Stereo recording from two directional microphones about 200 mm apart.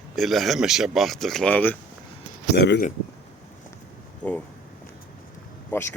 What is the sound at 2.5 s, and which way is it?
Speech, 60° left (ahead or behind).